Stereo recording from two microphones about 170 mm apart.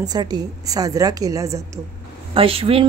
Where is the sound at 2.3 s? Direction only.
35° right (ahead or behind).